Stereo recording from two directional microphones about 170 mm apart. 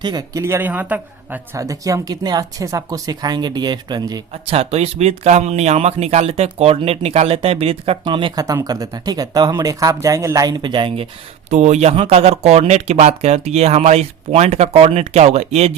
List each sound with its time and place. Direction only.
0.0 s speech: 25° right (ahead or behind)
4.3 s speech: 35° right (ahead or behind)